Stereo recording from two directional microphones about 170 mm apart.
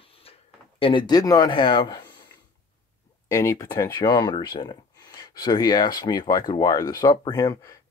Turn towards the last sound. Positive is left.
turn(degrees=20)  # may be behind; listen again after turning